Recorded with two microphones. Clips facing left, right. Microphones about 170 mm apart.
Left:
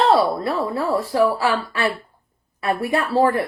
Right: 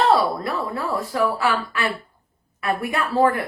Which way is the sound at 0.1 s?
25° left (ahead or behind).